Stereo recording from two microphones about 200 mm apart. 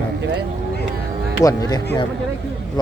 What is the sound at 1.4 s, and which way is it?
Speech, 15° left (ahead or behind).